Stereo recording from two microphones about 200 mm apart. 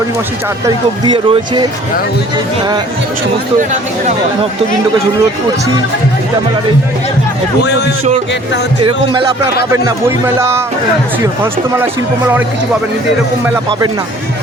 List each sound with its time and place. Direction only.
1.0 s speech: 25° right (ahead or behind)
9.7 s a man's voice: 15° right (ahead or behind)